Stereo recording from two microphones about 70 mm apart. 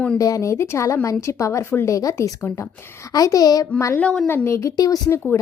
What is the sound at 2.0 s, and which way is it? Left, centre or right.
A woman's voice, left.